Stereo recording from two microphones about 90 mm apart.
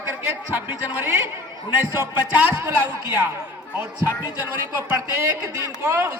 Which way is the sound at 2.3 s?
20° right (ahead or behind).